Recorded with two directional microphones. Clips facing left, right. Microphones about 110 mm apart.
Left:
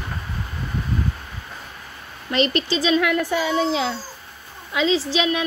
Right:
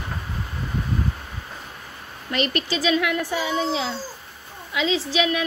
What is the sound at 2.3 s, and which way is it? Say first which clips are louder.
Speech: left 4 dB; 25° left (ahead or behind).